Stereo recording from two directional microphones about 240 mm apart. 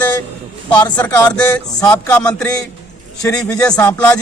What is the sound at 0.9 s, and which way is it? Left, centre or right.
A man's voice, centre.